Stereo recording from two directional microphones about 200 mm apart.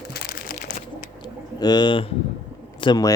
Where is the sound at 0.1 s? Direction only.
50° left (ahead or behind).